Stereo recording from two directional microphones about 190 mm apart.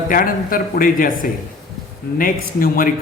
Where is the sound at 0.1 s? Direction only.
45° left (ahead or behind).